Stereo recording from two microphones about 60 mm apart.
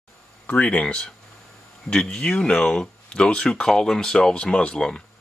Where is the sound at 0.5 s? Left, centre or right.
Left.